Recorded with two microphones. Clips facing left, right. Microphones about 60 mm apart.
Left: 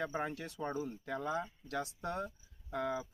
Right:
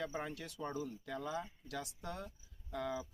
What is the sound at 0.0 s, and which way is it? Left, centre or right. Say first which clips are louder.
Speech: left 4 dB; left.